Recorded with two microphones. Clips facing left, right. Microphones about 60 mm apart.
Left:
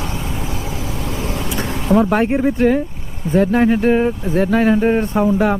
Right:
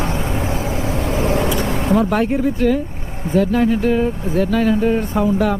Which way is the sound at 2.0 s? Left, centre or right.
Left.